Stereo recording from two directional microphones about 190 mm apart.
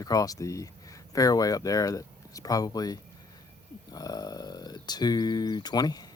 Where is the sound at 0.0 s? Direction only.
20° left (ahead or behind).